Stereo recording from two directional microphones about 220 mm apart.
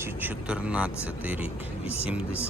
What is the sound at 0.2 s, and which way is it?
Speech, 5° right (ahead or behind).